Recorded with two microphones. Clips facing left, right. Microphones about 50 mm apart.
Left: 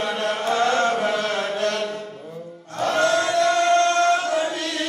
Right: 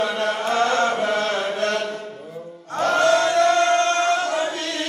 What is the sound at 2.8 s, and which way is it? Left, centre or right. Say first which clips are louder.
Music: right 2 dB; right.